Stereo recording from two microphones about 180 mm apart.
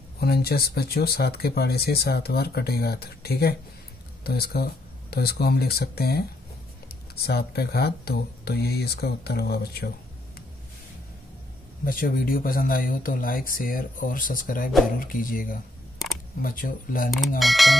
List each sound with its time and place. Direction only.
0.2 s speech: 60° left (ahead or behind)
11.8 s speech: 50° left (ahead or behind)
17.4 s a sound: centre (ahead or behind)